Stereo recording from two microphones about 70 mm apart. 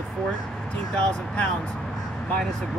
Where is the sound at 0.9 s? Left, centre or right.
Centre.